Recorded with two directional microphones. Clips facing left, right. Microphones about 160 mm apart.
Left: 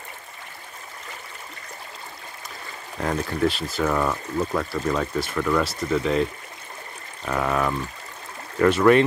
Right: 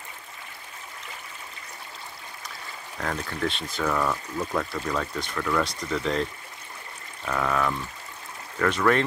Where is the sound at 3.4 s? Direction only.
5° left (ahead or behind).